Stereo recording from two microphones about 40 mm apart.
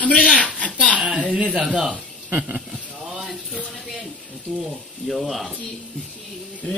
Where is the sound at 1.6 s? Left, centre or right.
Centre.